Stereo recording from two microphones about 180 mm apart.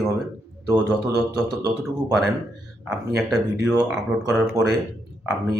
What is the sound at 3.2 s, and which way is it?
Speech, centre (ahead or behind).